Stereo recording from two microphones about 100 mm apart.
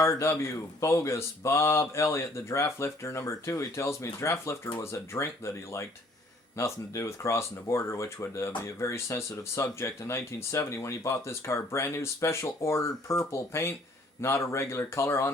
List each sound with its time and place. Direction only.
0.0 s speech: 30° left (ahead or behind)